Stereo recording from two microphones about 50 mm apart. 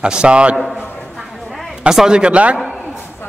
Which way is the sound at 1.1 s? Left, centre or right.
Centre.